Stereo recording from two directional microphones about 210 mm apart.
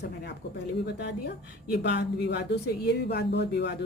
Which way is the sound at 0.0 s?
50° left (ahead or behind).